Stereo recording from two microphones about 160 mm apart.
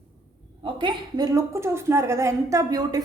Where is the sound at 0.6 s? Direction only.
30° right (ahead or behind).